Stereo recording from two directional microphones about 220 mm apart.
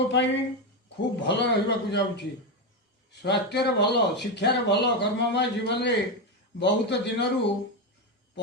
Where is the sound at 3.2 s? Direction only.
50° left (ahead or behind).